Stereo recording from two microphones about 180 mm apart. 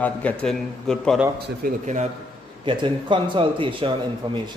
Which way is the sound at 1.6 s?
55° right (ahead or behind).